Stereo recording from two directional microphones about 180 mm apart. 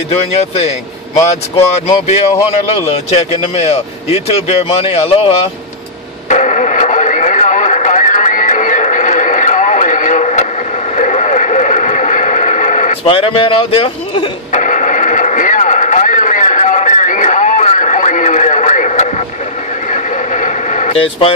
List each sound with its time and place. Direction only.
0.2 s speech: 35° left (ahead or behind)
6.2 s radio: 40° left (ahead or behind)
14.5 s radio: 45° left (ahead or behind)